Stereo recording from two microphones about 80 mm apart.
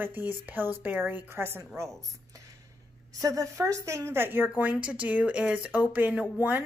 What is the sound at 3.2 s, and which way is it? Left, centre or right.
Speech, right.